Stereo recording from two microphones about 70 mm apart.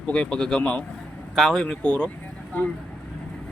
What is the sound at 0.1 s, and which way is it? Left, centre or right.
Speech, centre.